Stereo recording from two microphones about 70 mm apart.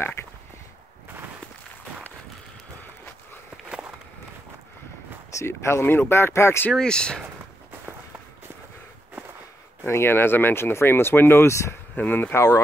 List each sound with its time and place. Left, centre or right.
3.6 s walk: centre
5.5 s speech: left
6.7 s speech: centre
9.8 s speech: left
11.9 s speech: left